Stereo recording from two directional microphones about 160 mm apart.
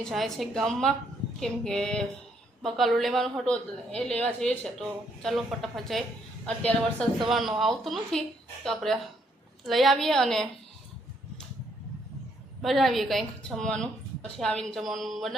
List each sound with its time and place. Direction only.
0.0 s a woman's voice: centre (ahead or behind)
12.6 s a woman's voice: centre (ahead or behind)